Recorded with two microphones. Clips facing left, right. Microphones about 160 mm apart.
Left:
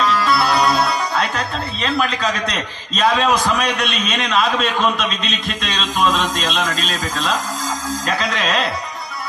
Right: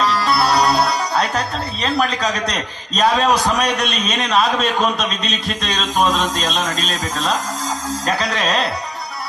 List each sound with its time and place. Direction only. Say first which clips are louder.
0.0 s music: even; 35° right (ahead or behind)
1.8 s a man's voice: right 1 dB; 35° right (ahead or behind)